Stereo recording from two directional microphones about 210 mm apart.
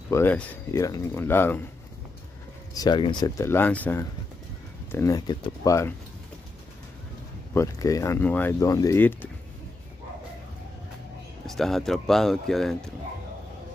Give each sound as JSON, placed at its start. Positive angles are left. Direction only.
{"t": 0.1, "sound": "speech", "side_deg": 10}
{"t": 2.7, "sound": "speech", "side_deg": 20}
{"t": 7.5, "sound": "speech", "side_deg": 15}
{"t": 11.4, "sound": "speech", "side_deg": 0}